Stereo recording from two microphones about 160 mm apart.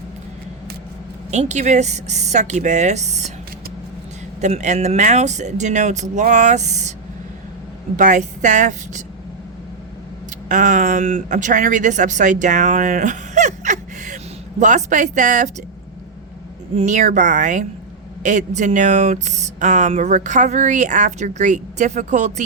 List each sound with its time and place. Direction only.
1.3 s speech: 45° right (ahead or behind)
4.4 s speech: 45° right (ahead or behind)
7.9 s speech: 50° right (ahead or behind)
10.5 s speech: 50° right (ahead or behind)
16.7 s speech: 50° right (ahead or behind)